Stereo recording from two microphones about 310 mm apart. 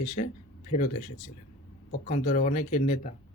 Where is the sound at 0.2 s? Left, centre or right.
Left.